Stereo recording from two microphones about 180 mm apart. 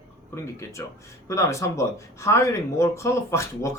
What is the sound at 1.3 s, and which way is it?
Speech, 15° left (ahead or behind).